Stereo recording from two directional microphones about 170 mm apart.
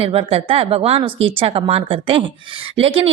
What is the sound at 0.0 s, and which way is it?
A woman's voice, 35° right (ahead or behind).